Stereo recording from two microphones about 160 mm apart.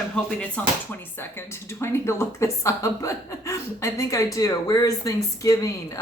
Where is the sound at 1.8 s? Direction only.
15° left (ahead or behind).